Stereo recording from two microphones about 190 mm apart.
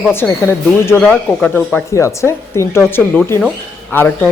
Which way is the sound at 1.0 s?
Centre (ahead or behind).